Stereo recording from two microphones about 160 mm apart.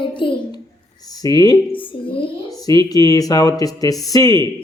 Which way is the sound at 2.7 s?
20° left (ahead or behind).